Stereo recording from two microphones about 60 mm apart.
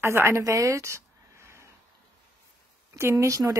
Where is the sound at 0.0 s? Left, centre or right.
Right.